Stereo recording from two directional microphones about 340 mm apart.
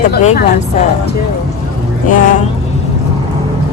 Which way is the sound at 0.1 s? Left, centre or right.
Left.